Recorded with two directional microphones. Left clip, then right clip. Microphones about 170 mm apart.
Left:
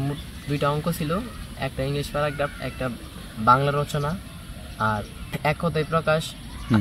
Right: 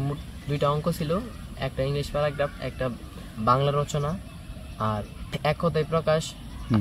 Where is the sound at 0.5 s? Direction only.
10° right (ahead or behind).